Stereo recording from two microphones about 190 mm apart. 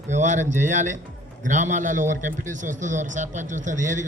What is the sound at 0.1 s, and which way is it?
A man's voice, 40° right (ahead or behind).